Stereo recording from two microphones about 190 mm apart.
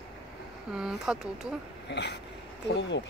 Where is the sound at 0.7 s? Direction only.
5° right (ahead or behind).